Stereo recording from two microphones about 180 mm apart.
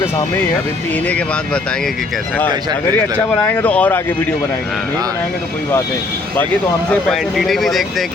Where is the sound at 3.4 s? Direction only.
10° left (ahead or behind).